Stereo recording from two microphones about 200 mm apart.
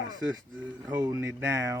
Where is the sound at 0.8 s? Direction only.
20° right (ahead or behind).